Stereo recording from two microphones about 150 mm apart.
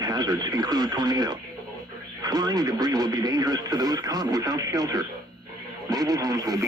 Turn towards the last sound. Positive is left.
turn(degrees=-25)  # may be behind; listen again after turning